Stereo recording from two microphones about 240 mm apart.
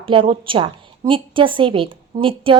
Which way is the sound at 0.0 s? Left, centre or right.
Right.